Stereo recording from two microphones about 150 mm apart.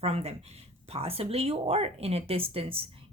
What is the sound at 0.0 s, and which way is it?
A woman's voice, 40° right (ahead or behind).